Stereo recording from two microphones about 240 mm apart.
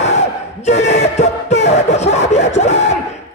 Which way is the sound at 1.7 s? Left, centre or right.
Left.